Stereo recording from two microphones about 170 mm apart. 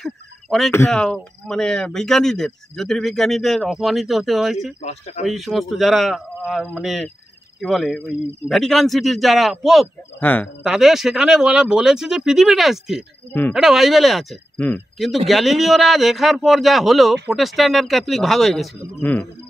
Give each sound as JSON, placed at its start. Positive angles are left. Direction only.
{"t": 0.0, "sound": "a sound", "side_deg": 0}
{"t": 0.7, "sound": "speech", "side_deg": 15}
{"t": 0.9, "sound": "speech", "side_deg": 5}
{"t": 4.8, "sound": "speech", "side_deg": 40}
{"t": 5.2, "sound": "speech", "side_deg": 0}
{"t": 10.2, "sound": "speech", "side_deg": 10}
{"t": 10.6, "sound": "speech", "side_deg": -5}